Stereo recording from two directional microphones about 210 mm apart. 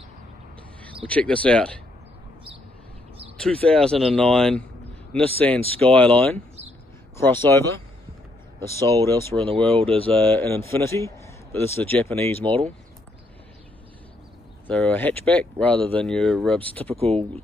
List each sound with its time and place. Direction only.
1.0 s speech: 5° left (ahead or behind)
3.3 s speech: 5° left (ahead or behind)
9.0 s speech: 10° left (ahead or behind)
9.8 s speech: 25° right (ahead or behind)
10.3 s speech: 10° left (ahead or behind)
14.7 s speech: 5° left (ahead or behind)
16.8 s speech: 30° right (ahead or behind)